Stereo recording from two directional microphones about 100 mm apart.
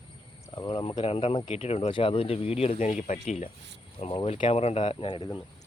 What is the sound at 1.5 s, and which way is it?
Speech, 85° left.